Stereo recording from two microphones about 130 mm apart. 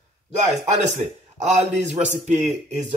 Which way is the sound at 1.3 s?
65° right (ahead or behind).